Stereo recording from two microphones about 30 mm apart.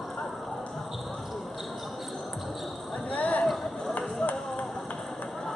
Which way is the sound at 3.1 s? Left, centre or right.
Left.